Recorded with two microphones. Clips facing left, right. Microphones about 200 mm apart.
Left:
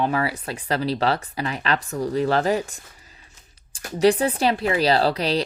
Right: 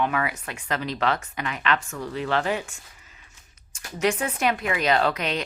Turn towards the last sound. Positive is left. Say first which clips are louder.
# left 3 dB
turn(degrees=35)  # may be behind; listen again after turning